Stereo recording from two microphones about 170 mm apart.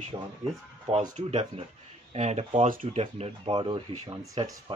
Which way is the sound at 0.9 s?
40° right (ahead or behind).